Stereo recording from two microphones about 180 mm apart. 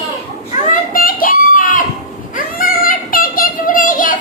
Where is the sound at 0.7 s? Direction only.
50° left (ahead or behind).